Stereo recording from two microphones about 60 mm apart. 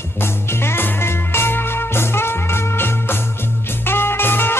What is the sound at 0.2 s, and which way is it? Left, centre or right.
Music, left.